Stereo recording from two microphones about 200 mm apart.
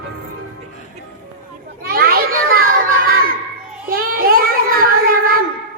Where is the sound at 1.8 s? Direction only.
50° right (ahead or behind).